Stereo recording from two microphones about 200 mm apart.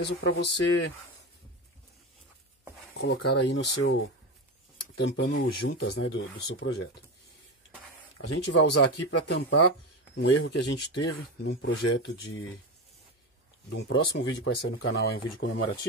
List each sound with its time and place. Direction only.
0.0 s speech: 60° left (ahead or behind)
3.0 s speech: 55° left (ahead or behind); by 4.1 s 70° left (ahead or behind)
4.9 s speech: 60° left (ahead or behind)
5.7 s speech: 75° left (ahead or behind)
8.3 s speech: 65° left (ahead or behind)
13.7 s speech: 55° left (ahead or behind)